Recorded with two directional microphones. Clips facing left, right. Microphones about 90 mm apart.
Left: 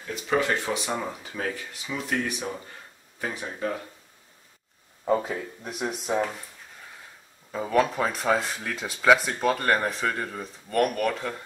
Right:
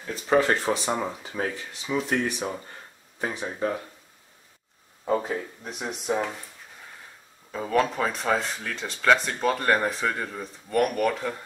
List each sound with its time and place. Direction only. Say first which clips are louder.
0.0 s speech: right 3 dB; 35° right (ahead or behind); by 3.8 s 20° right (ahead or behind)
5.0 s speech: left 1 dB; centre (ahead or behind)
7.5 s speech: left 1 dB; 5° left (ahead or behind)